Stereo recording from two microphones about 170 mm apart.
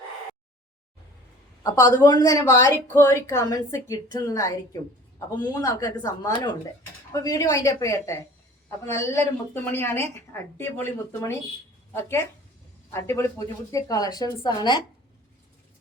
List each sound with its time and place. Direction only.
1.6 s a woman's voice: 20° left (ahead or behind)